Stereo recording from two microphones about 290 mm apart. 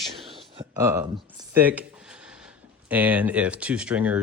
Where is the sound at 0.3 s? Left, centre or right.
Centre.